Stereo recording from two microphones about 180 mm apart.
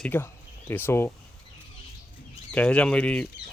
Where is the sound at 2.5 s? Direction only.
5° left (ahead or behind).